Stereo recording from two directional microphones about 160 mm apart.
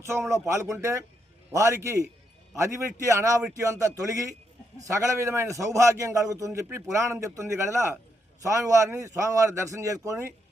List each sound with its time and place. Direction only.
0.0 s a man's voice: 15° right (ahead or behind)